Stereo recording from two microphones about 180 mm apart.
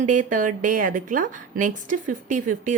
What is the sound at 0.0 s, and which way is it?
A woman's voice, 45° right (ahead or behind).